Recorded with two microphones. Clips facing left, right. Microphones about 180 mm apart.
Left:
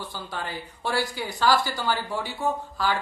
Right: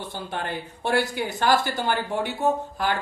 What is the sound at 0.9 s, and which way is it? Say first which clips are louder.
Speech: right 5 dB; 20° right (ahead or behind).